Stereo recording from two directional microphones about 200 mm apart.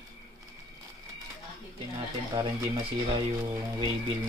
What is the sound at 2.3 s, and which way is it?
Speech, 20° right (ahead or behind).